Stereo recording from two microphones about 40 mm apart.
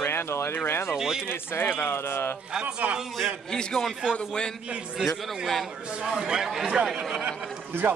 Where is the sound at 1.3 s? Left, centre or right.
Left.